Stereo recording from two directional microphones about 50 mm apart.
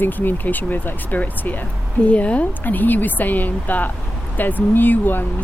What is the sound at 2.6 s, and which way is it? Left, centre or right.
Speech, left.